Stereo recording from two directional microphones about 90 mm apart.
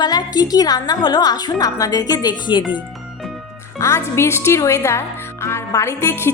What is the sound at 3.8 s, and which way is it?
A woman's voice, 30° left (ahead or behind).